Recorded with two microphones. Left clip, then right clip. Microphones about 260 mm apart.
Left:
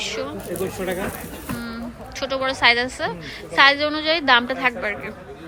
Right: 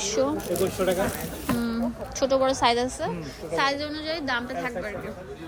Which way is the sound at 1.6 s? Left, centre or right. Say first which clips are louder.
Right 3 dB; centre.